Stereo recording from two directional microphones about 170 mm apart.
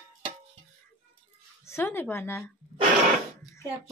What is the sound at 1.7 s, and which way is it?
Speech, 15° left (ahead or behind).